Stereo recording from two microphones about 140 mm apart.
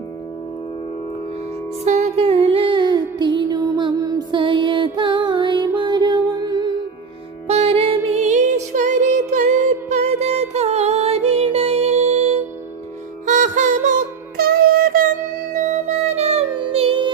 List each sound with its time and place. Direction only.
1.8 s music: 55° right (ahead or behind); by 6.7 s 30° right (ahead or behind)
7.4 s music: 50° right (ahead or behind)
8.2 s music: 60° right (ahead or behind)
9.9 s music: 50° right (ahead or behind)
13.2 s music: 65° right (ahead or behind)
14.3 s music: 90° right
15.5 s music: 55° right (ahead or behind); by 17.1 s 40° right (ahead or behind)